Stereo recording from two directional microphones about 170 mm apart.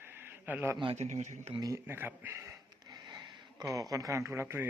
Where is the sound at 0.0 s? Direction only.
15° right (ahead or behind).